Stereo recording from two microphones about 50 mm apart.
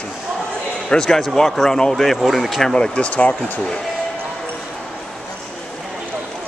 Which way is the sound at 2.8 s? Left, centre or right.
Centre.